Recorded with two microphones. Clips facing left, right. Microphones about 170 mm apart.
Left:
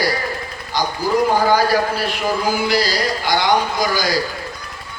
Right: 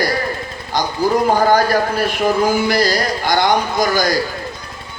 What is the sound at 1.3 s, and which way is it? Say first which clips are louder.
Speech: right 2 dB; 45° right (ahead or behind).